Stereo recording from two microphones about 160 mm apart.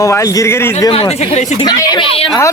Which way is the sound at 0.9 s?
40° left (ahead or behind).